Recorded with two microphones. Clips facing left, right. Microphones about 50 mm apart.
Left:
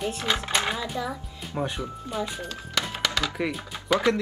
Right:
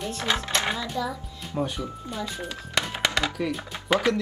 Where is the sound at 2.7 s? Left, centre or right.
Right.